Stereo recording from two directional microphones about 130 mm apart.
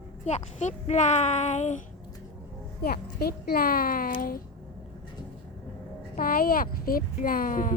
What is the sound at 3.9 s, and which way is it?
Speech, 90° left.